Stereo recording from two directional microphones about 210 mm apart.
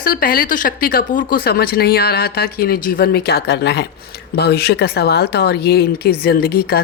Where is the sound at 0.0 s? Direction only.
45° left (ahead or behind).